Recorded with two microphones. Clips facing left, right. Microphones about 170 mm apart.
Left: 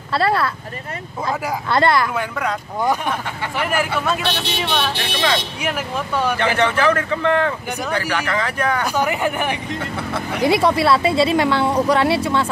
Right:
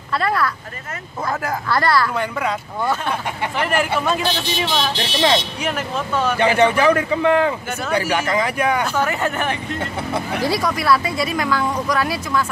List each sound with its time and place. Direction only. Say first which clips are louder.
0.1 s speech: left 2 dB; 30° left (ahead or behind)
1.7 s speech: left 2 dB; 20° left (ahead or behind)
2.1 s speech: right 1 dB; centre (ahead or behind)
2.8 s speech: left 2 dB; 15° left (ahead or behind)
4.2 s speech: right 1 dB; 60° left (ahead or behind)
5.1 s speech: right 4 dB; 25° right (ahead or behind)
5.6 s speech: even; 10° left (ahead or behind)
6.3 s speech: right 5 dB; 15° right (ahead or behind)
8.8 s speech: left 1 dB; 15° left (ahead or behind)
10.4 s speech: left 7 dB; 25° left (ahead or behind)